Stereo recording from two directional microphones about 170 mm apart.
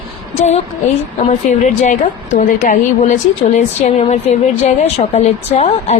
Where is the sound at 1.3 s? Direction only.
45° left (ahead or behind).